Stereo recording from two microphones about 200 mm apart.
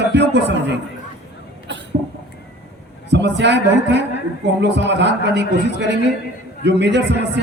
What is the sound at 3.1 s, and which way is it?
A man's voice, 60° right (ahead or behind).